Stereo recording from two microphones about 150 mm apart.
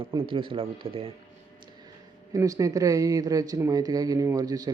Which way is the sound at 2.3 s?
20° right (ahead or behind).